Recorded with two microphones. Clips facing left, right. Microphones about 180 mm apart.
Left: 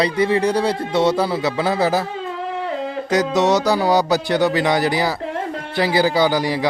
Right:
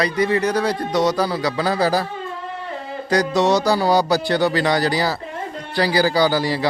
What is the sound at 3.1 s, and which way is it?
A man's voice, 20° left (ahead or behind).